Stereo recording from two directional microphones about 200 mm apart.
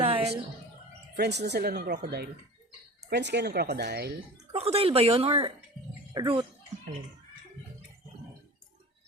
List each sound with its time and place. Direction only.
0.0 s chicken: 30° right (ahead or behind)
1.2 s speech: 55° right (ahead or behind)
4.5 s speech: 30° right (ahead or behind)